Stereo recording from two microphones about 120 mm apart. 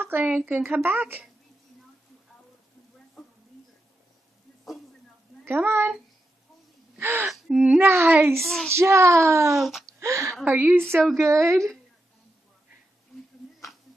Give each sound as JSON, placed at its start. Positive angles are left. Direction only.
{"t": 0.0, "sound": "speech", "side_deg": -15}
{"t": 5.4, "sound": "a child's voice", "side_deg": -20}
{"t": 7.0, "sound": "gasp", "side_deg": -20}
{"t": 7.2, "sound": "speech", "side_deg": -5}
{"t": 9.5, "sound": "a sound", "side_deg": 0}
{"t": 9.9, "sound": "a woman's voice", "side_deg": -25}